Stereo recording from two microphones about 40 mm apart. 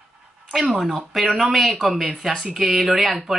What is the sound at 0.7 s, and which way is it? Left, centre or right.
Speech, centre.